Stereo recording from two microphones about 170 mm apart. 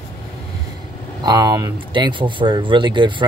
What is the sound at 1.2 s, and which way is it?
Speech, 20° right (ahead or behind).